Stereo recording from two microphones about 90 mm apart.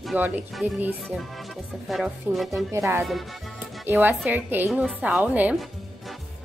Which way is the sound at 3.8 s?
25° right (ahead or behind).